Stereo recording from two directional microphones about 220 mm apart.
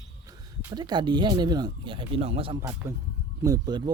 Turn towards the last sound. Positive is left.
turn(degrees=-20)  # may be behind; listen again after turning